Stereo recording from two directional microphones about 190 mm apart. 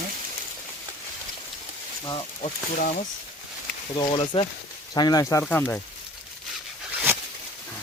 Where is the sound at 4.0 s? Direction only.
25° left (ahead or behind); by 5.8 s 5° left (ahead or behind).